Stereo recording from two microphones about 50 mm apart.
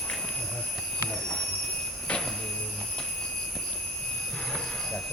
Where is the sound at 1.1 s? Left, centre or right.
Centre.